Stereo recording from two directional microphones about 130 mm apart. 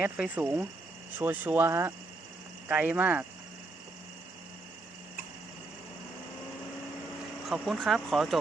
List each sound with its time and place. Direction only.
0.0 s speech: 15° right (ahead or behind)
7.4 s speech: centre (ahead or behind)